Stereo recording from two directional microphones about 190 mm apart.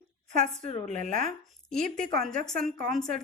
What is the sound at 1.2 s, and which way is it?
A woman's voice, 5° left (ahead or behind).